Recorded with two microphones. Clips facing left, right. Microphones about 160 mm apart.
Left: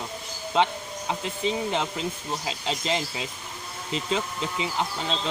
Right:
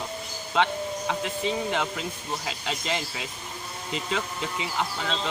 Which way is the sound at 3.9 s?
30° left (ahead or behind).